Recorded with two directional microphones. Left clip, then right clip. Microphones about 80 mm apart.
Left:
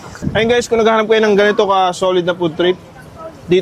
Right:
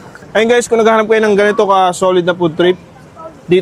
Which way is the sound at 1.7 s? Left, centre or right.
Right.